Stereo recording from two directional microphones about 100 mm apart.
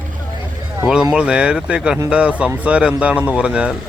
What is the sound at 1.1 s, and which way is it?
Speech, 10° right (ahead or behind).